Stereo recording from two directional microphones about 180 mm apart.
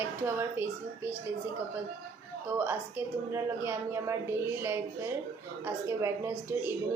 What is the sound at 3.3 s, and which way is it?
A woman's voice, 15° right (ahead or behind).